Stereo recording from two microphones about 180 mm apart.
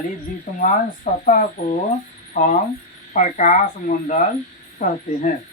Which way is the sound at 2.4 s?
40° left (ahead or behind).